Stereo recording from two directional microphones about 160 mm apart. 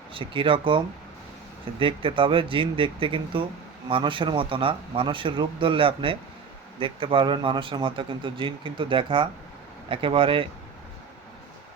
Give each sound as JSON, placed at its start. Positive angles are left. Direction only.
{"t": 0.1, "sound": "speech", "side_deg": -35}